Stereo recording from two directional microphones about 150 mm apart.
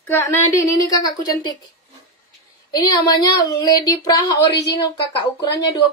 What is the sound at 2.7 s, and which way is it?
Speech, 25° left (ahead or behind).